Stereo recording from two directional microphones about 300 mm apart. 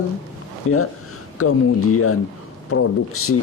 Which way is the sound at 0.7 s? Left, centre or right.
Left.